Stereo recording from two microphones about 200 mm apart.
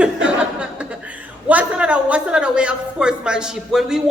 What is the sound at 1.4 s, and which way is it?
A woman's voice, 5° right (ahead or behind).